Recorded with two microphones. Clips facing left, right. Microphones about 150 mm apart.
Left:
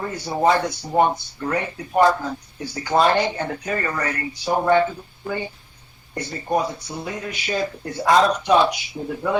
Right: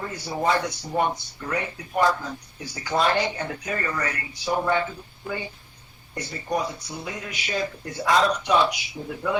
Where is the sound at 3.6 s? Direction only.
55° left (ahead or behind).